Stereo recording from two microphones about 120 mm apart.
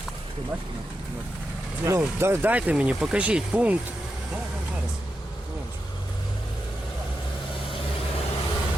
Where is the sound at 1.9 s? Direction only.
25° right (ahead or behind).